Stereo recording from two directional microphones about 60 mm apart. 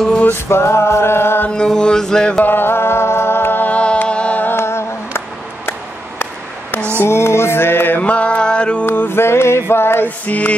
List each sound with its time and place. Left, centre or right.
0.5 s music: left
1.5 s mantra: centre
2.4 s music: left
3.6 s music: left
4.4 s humming: left
7.0 s mantra: left
8.0 s music: centre
8.8 s mantra: left
10.0 s mantra: left